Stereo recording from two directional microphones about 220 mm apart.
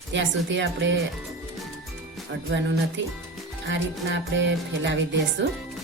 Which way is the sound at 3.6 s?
55° right (ahead or behind).